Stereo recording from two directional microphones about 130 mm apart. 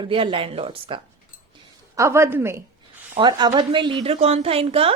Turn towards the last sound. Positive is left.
turn(degrees=-50)  # may be behind; listen again after turning